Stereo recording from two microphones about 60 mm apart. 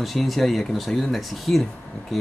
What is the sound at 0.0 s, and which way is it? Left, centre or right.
Speech, centre.